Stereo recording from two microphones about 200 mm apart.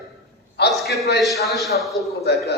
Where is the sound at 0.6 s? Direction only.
55° left (ahead or behind).